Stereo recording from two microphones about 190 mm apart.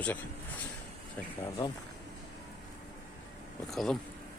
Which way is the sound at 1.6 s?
20° left (ahead or behind).